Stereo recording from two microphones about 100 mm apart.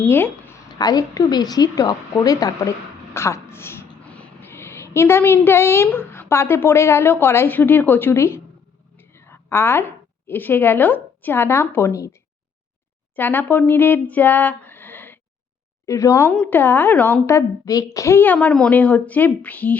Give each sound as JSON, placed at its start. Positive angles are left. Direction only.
{"t": 0.0, "sound": "a woman's voice", "side_deg": 20}
{"t": 0.8, "sound": "a woman's voice", "side_deg": 40}
{"t": 4.0, "sound": "a woman's voice", "side_deg": 15}
{"t": 13.1, "sound": "speech", "side_deg": 20}
{"t": 15.9, "sound": "a woman's voice", "side_deg": 30}
{"t": 16.5, "sound": "a woman's voice", "side_deg": 20}
{"t": 17.2, "sound": "a woman's voice", "side_deg": 30}
{"t": 18.2, "sound": "a woman's voice", "side_deg": 15}